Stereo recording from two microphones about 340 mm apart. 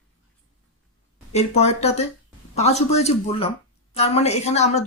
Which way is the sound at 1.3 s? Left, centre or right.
Centre.